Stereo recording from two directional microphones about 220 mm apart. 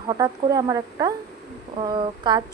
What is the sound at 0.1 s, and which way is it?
Speech, 15° right (ahead or behind).